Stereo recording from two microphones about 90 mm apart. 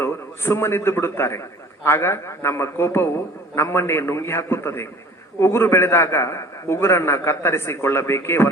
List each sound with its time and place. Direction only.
0.0 s a man's voice: 30° left (ahead or behind)